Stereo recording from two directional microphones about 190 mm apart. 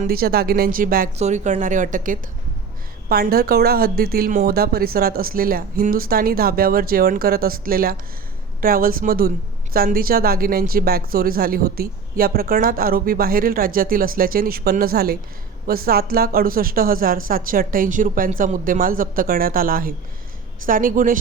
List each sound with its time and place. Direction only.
0.0 s speech: 50° right (ahead or behind)
1.1 s speech: 35° right (ahead or behind)